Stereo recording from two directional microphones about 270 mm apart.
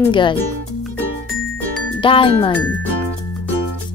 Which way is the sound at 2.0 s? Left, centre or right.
Centre.